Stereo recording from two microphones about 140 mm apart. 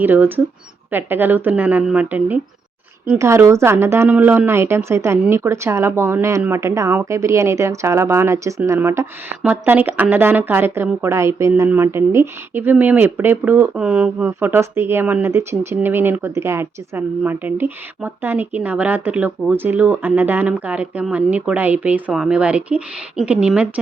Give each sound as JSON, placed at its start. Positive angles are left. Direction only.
{"t": 0.0, "sound": "a woman's voice", "side_deg": -15}